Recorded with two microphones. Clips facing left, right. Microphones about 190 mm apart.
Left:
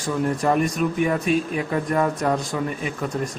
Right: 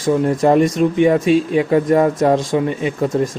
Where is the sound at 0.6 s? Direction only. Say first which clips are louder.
Right 8 dB; 90° right.